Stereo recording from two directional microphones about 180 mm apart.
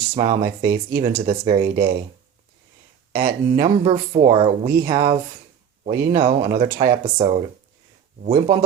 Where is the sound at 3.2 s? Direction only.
30° right (ahead or behind).